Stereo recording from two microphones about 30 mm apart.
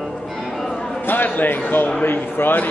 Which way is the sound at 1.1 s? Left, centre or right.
Left.